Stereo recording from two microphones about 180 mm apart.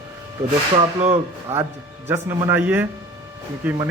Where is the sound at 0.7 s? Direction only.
35° right (ahead or behind).